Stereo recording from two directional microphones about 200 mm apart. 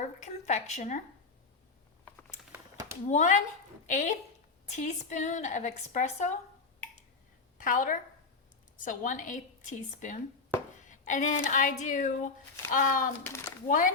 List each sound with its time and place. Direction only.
0.2 s a woman's voice: 35° left (ahead or behind)
2.5 s a sound: 15° right (ahead or behind)
3.1 s a woman's voice: 40° left (ahead or behind)
7.6 s a woman's voice: 45° left (ahead or behind)